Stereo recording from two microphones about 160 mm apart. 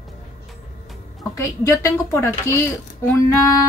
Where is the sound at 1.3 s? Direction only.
15° left (ahead or behind).